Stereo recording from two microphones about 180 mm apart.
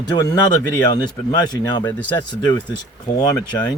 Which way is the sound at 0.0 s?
25° left (ahead or behind).